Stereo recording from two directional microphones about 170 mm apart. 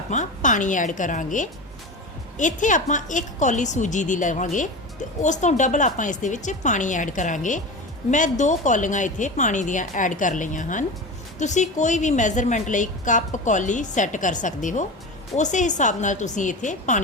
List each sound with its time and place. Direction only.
0.1 s a woman's voice: 45° left (ahead or behind)